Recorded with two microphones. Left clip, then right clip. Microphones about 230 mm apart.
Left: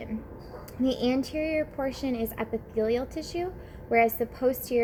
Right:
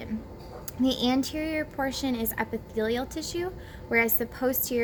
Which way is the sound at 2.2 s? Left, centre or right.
Centre.